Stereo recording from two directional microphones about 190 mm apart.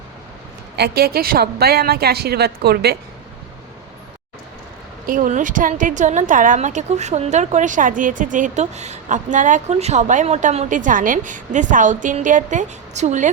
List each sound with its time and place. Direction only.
0.8 s a woman's voice: 55° right (ahead or behind)
5.0 s a woman's voice: 45° right (ahead or behind)